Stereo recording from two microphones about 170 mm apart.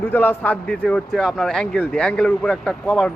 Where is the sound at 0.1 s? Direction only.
10° left (ahead or behind).